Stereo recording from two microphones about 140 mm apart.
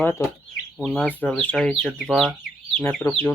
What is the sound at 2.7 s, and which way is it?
Speech, 15° left (ahead or behind).